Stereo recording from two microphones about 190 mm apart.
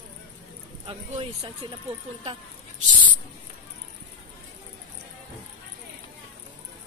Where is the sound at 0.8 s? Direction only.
30° right (ahead or behind).